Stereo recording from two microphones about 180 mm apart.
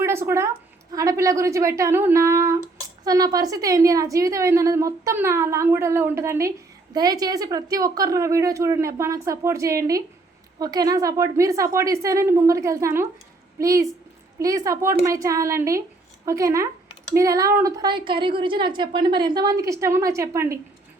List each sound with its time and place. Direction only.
0.0 s a woman's voice: 15° right (ahead or behind)